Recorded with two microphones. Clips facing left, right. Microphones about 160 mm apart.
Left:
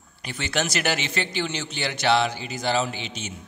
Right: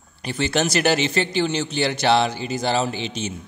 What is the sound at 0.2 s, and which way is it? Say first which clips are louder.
A man's voice: right 6 dB; 30° right (ahead or behind).